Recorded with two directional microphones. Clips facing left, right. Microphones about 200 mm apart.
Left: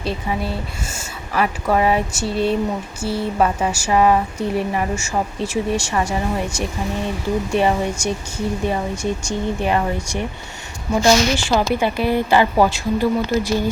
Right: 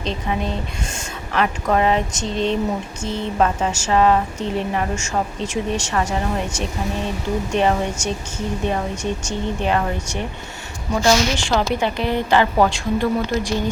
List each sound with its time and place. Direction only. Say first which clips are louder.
0.0 s a woman's voice: even; 10° left (ahead or behind)